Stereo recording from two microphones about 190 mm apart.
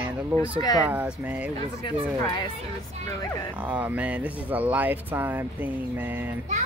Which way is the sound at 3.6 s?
10° right (ahead or behind).